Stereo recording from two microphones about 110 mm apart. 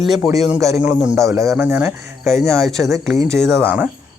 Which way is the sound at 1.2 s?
30° right (ahead or behind).